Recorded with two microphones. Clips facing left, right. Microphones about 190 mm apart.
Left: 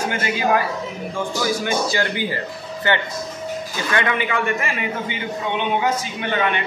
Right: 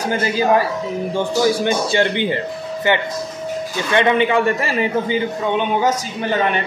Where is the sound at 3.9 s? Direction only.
25° right (ahead or behind).